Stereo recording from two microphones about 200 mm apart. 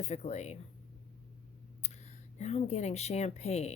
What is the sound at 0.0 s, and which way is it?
Speech, 35° left (ahead or behind).